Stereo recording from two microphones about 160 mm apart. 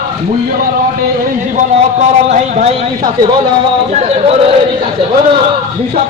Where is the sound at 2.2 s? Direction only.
45° right (ahead or behind).